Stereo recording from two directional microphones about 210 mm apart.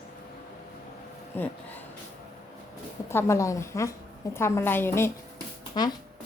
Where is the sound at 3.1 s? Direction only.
15° left (ahead or behind).